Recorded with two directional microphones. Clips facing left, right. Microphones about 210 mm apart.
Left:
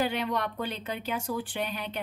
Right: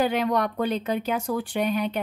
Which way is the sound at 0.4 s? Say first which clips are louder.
Right 8 dB; 40° right (ahead or behind).